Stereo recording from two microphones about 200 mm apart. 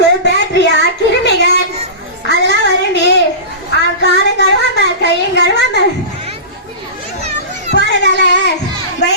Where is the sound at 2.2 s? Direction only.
60° left (ahead or behind).